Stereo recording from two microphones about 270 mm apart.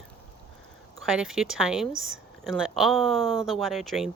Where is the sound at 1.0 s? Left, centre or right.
Centre.